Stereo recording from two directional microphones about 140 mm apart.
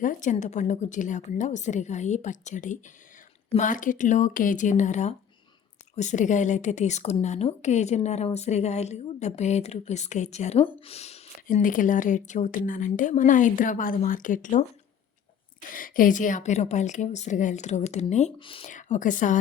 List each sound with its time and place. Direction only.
0.0 s a woman's voice: 70° left (ahead or behind)
3.6 s a woman's voice: 70° left (ahead or behind); by 11.2 s 50° left (ahead or behind)
11.4 s a woman's voice: 70° left (ahead or behind)
15.7 s a woman's voice: 80° left; by 18.3 s 55° left (ahead or behind)
18.3 s speech: 40° left (ahead or behind)
18.7 s a woman's voice: 65° left (ahead or behind)